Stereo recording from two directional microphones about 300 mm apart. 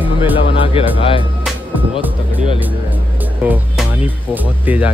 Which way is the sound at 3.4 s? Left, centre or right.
Centre.